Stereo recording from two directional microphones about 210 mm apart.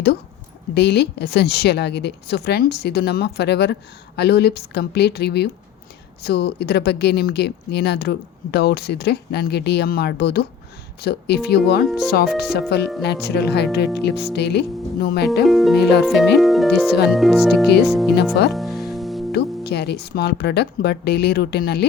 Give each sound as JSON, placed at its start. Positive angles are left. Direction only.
{"t": 0.7, "sound": "a woman's voice", "side_deg": 50}
{"t": 15.4, "sound": "speech", "side_deg": 0}
{"t": 15.8, "sound": "a woman's voice", "side_deg": 50}
{"t": 16.4, "sound": "speech", "side_deg": 0}
{"t": 17.7, "sound": "a woman's voice", "side_deg": 50}
{"t": 18.5, "sound": "music", "side_deg": 0}
{"t": 19.3, "sound": "a woman's voice", "side_deg": 50}